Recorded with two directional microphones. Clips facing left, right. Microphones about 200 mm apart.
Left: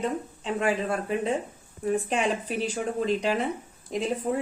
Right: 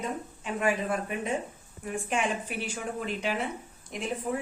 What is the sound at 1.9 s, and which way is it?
A woman's voice, 35° left (ahead or behind).